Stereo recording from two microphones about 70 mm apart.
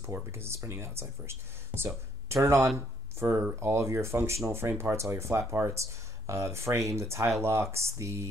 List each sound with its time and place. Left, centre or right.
0.0 s speech: right